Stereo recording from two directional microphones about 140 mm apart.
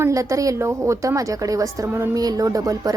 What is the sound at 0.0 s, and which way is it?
A woman's voice, 20° right (ahead or behind).